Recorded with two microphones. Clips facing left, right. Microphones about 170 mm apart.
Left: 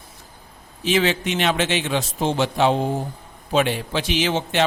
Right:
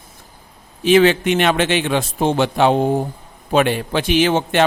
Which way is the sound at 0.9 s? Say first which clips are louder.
Right 8 dB; 60° right (ahead or behind).